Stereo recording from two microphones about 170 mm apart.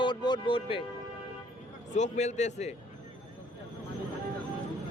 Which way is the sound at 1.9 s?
45° left (ahead or behind).